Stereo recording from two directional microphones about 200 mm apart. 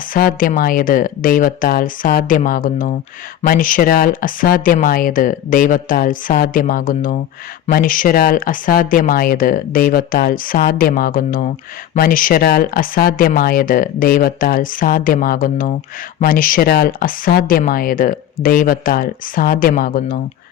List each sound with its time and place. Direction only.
0.1 s speech: 45° left (ahead or behind)